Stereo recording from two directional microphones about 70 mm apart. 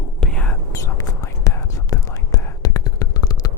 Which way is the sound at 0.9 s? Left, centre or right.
Left.